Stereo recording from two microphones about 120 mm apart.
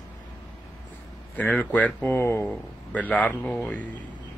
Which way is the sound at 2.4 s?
10° left (ahead or behind).